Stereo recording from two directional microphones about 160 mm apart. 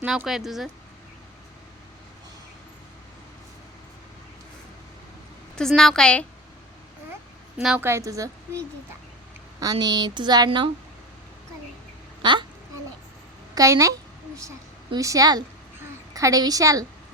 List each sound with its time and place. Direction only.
0.0 s speech: 5° right (ahead or behind)
5.5 s speech: 5° left (ahead or behind)
7.6 s speech: 5° right (ahead or behind)
7.9 s speech: 20° right (ahead or behind)
9.6 s speech: 25° right (ahead or behind)
12.2 s a sound: 30° right (ahead or behind)
13.5 s a woman's voice: 20° right (ahead or behind)
14.9 s speech: 20° right (ahead or behind)